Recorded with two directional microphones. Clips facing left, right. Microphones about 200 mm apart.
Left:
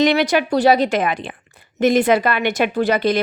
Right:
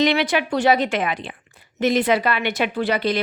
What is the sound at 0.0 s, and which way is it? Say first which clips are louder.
Speech: left 3 dB; 45° left (ahead or behind).